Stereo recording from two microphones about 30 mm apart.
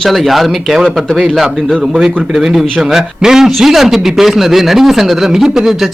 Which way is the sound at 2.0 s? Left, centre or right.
Centre.